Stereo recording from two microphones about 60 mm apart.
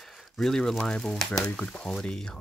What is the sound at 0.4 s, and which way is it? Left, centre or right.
Speech, centre.